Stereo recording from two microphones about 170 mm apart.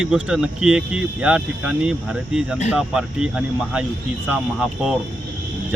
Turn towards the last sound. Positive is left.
turn(degrees=0)  # may be behind; listen again after turning